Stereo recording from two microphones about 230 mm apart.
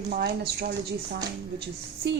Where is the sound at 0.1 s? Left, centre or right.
Right.